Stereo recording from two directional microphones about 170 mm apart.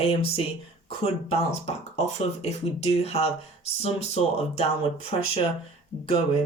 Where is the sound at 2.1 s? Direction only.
40° left (ahead or behind).